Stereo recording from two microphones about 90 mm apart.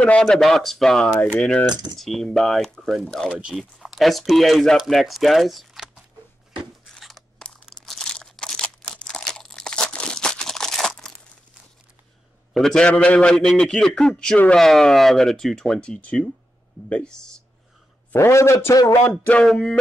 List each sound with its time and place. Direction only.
0.0 s speech: 10° left (ahead or behind)
3.3 s speech: 10° right (ahead or behind)
7.0 s crunch: centre (ahead or behind)
12.5 s a man's voice: 5° left (ahead or behind)
18.1 s a man's voice: 30° left (ahead or behind)
19.0 s a man's voice: 15° left (ahead or behind)